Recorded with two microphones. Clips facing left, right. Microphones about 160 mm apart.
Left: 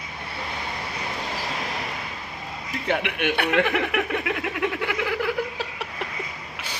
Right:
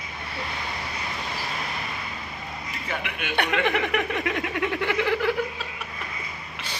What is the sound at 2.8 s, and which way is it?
Speech, 65° left (ahead or behind).